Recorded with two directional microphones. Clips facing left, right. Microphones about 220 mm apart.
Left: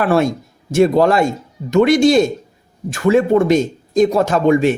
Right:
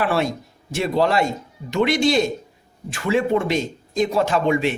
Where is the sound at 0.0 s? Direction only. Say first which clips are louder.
Left 6 dB; 45° left (ahead or behind).